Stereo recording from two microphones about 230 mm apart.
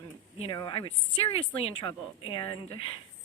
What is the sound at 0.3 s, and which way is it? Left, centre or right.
Speech, left.